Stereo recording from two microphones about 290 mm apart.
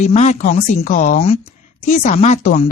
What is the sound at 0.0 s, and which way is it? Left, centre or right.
A man's voice, left.